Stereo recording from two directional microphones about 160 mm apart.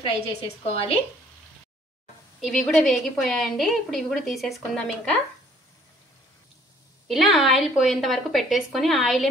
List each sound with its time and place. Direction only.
0.0 s a woman's voice: 40° left (ahead or behind)
2.4 s a woman's voice: centre (ahead or behind)
7.1 s a woman's voice: centre (ahead or behind)